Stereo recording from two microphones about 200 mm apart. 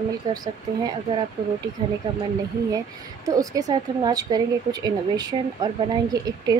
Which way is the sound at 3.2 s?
15° right (ahead or behind).